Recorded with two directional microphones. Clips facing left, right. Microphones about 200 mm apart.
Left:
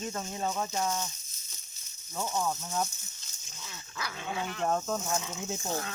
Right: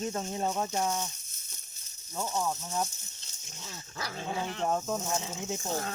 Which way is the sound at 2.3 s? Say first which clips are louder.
Even; 5° right (ahead or behind).